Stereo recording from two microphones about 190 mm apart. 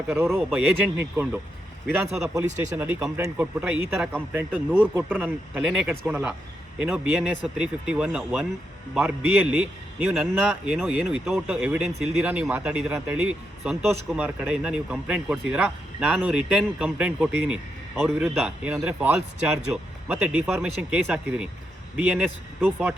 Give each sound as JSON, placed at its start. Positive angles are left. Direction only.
{"t": 0.3, "sound": "speech", "side_deg": 0}
{"t": 0.9, "sound": "speech", "side_deg": -10}
{"t": 3.4, "sound": "speech", "side_deg": -5}
{"t": 11.9, "sound": "speech", "side_deg": -35}
{"t": 12.1, "sound": "speech", "side_deg": -5}